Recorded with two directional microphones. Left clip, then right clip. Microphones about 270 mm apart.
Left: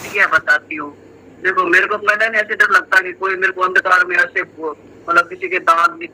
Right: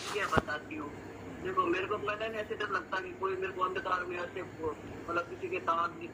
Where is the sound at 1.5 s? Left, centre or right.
Left.